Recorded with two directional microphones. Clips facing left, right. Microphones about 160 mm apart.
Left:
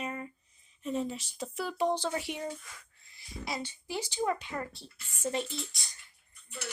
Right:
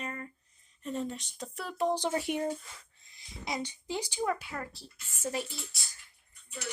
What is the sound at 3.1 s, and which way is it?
Speech, 20° right (ahead or behind).